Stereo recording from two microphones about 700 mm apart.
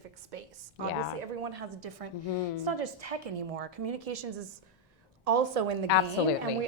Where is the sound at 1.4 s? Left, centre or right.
Right.